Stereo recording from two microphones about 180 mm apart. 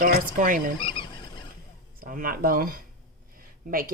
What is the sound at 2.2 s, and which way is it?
Speech, 55° right (ahead or behind).